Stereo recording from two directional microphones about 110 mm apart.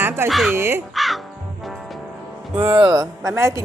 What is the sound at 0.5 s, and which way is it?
Speech, 20° right (ahead or behind).